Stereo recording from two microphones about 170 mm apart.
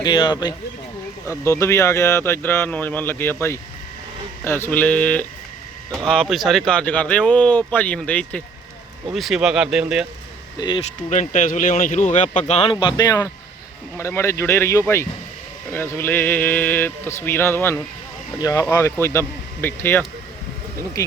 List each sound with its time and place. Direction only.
0.0 s speech: 25° left (ahead or behind)
4.4 s speech: 15° left (ahead or behind); by 10.1 s 5° right (ahead or behind)
11.1 s speech: 45° left (ahead or behind)
13.0 s speech: 20° left (ahead or behind)